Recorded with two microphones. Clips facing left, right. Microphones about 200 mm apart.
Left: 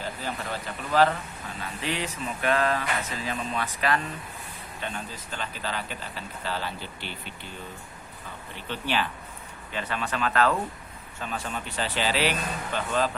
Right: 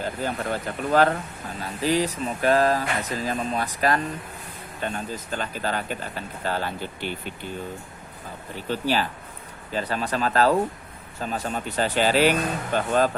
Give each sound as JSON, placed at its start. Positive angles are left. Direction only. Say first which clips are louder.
{"t": 0.0, "sound": "speech", "louder": "right 6 dB", "side_deg": -50}
{"t": 8.5, "sound": "speech", "louder": "right 5 dB", "side_deg": -40}